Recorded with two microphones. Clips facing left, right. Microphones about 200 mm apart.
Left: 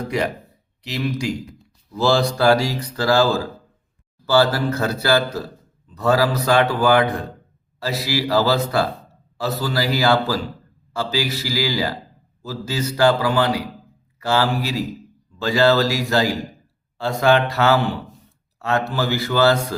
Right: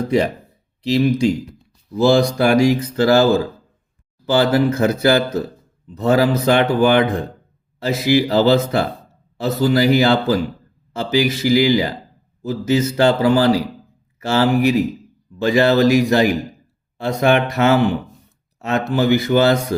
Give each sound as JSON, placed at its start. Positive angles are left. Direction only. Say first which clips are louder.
{"t": 0.8, "sound": "speech", "louder": "right 9 dB", "side_deg": -25}